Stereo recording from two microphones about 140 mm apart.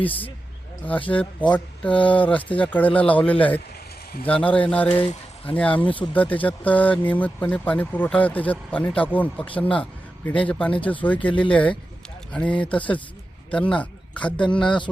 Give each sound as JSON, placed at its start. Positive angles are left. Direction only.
{"t": 0.9, "sound": "speech", "side_deg": 10}